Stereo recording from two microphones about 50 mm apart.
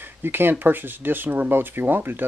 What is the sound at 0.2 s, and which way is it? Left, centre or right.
Speech, right.